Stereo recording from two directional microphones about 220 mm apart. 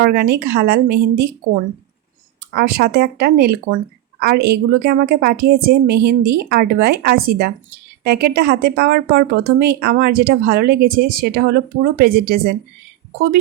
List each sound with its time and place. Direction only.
0.0 s a woman's voice: 45° right (ahead or behind)
2.6 s a woman's voice: 45° right (ahead or behind)